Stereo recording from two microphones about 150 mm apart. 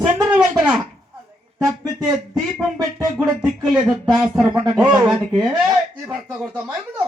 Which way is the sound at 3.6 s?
Centre (ahead or behind).